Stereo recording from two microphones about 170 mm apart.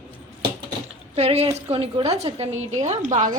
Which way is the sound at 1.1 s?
40° right (ahead or behind).